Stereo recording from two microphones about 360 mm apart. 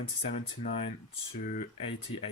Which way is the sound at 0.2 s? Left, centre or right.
Centre.